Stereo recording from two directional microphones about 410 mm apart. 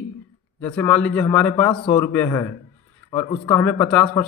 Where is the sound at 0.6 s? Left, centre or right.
Centre.